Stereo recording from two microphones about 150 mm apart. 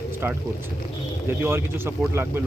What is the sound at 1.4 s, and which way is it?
Speech, 15° right (ahead or behind).